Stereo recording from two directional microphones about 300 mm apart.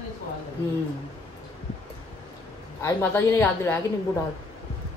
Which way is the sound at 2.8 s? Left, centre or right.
Centre.